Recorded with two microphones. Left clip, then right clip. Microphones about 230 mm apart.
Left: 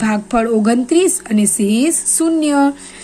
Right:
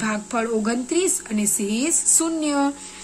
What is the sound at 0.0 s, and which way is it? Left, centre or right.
A woman's voice, centre.